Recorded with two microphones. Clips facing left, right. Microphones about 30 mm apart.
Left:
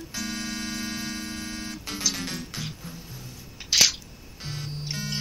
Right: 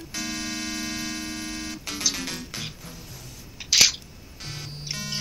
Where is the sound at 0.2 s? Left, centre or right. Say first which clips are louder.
Right 1 dB; right.